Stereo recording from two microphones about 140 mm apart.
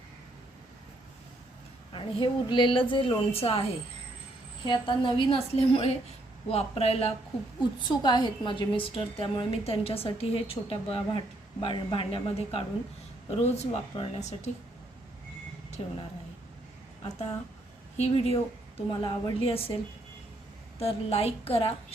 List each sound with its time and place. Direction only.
1.9 s a woman's voice: 35° left (ahead or behind)
4.6 s a woman's voice: 35° left (ahead or behind)
7.9 s a woman's voice: 30° left (ahead or behind)
13.3 s a woman's voice: 50° left (ahead or behind)
15.8 s a woman's voice: 45° left (ahead or behind)
17.0 s a woman's voice: 50° left (ahead or behind)
20.7 s a woman's voice: 45° left (ahead or behind)